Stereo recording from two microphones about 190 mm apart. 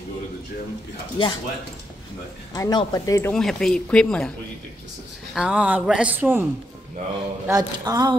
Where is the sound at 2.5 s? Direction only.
20° left (ahead or behind).